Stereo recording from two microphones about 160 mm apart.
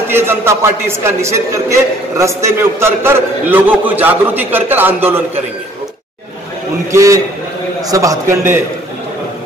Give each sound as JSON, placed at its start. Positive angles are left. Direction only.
{"t": 0.1, "sound": "a man's voice", "side_deg": -15}
{"t": 6.9, "sound": "a man's voice", "side_deg": -20}